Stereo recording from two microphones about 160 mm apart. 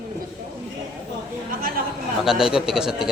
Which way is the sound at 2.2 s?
5° right (ahead or behind).